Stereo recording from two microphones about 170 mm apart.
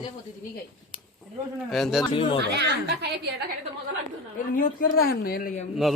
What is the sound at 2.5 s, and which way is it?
Speech, 75° right (ahead or behind).